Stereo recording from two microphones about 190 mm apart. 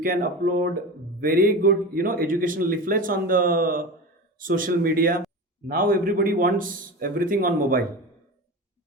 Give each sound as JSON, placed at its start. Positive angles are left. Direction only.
{"t": 0.0, "sound": "a man's voice", "side_deg": -50}